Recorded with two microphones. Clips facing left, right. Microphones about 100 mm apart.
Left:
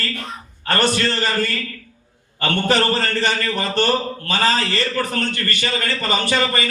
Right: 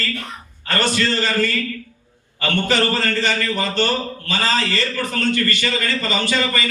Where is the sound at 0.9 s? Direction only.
50° left (ahead or behind).